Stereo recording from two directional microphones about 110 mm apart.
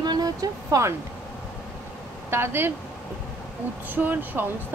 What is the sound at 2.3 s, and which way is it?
Speech, 20° right (ahead or behind).